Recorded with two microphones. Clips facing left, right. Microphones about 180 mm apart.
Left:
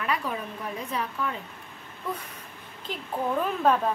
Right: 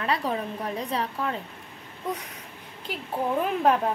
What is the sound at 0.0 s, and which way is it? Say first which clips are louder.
Speech: right 3 dB; 35° right (ahead or behind).